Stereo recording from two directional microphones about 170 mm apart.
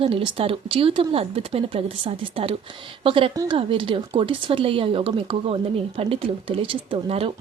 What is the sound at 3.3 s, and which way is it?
Speech, 20° right (ahead or behind).